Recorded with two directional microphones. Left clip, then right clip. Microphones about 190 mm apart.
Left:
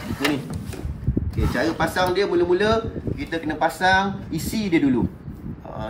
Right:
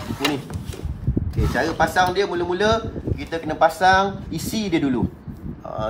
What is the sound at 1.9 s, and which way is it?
A man's voice, 35° right (ahead or behind).